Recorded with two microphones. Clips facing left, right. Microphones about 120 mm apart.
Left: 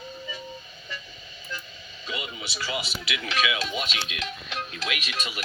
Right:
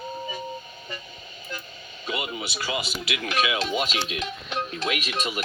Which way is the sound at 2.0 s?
50° right (ahead or behind).